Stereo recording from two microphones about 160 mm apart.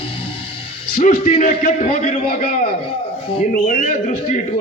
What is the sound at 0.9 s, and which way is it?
Music, 55° left (ahead or behind).